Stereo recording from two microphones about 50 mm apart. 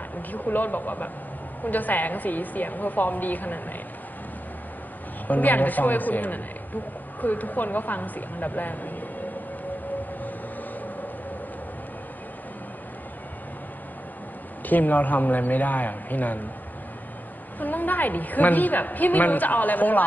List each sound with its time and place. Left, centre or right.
0.3 s a woman's voice: left
5.3 s a woman's voice: left
14.7 s a woman's voice: left
17.6 s a woman's voice: left